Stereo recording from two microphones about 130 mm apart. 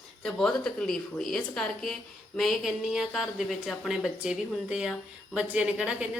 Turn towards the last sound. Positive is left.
turn(degrees=-10)  # may be behind; listen again after turning